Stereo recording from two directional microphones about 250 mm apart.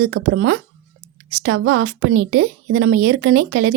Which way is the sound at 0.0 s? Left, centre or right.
Right.